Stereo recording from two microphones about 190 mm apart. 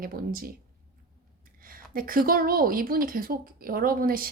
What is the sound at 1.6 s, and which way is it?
A woman's voice, 50° right (ahead or behind).